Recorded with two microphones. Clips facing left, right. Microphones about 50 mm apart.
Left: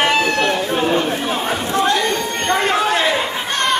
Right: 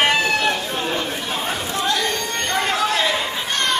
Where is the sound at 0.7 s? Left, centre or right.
Left.